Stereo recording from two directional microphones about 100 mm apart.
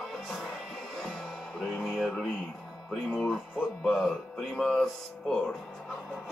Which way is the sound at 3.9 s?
5° right (ahead or behind).